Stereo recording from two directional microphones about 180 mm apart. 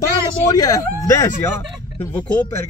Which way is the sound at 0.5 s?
20° left (ahead or behind).